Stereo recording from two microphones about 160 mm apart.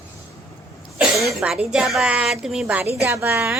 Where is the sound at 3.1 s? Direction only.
15° right (ahead or behind).